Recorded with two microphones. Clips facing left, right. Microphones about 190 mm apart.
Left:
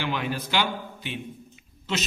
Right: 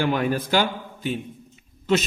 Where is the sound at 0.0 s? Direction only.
45° right (ahead or behind).